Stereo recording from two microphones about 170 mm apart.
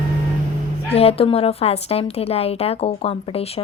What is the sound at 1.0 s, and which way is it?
A woman's voice, 35° left (ahead or behind).